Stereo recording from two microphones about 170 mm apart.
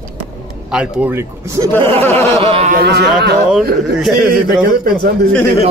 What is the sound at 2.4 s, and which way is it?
Speech, 35° right (ahead or behind).